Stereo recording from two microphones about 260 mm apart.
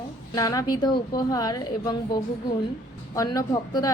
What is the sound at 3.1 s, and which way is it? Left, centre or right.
Speech, centre.